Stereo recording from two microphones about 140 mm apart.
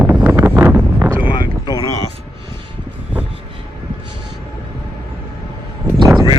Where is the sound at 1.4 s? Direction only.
30° left (ahead or behind).